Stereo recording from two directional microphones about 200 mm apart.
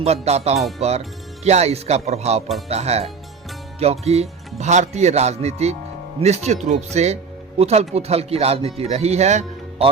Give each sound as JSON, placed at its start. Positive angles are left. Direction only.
{"t": 0.0, "sound": "speech", "side_deg": -30}